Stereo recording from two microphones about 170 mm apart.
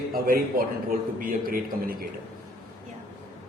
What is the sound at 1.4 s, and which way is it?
Speech, 60° right (ahead or behind).